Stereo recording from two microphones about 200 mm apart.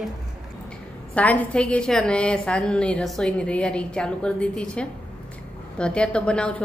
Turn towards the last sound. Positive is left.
turn(degrees=5)  # may be behind; listen again after turning